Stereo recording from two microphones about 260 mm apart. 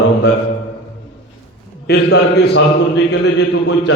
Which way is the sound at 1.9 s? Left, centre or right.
Left.